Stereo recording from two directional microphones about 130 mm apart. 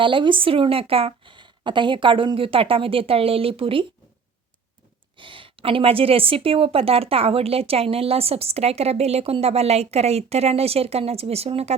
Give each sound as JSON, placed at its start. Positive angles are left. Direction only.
{"t": 0.0, "sound": "a woman's voice", "side_deg": -40}
{"t": 5.1, "sound": "a woman's voice", "side_deg": -40}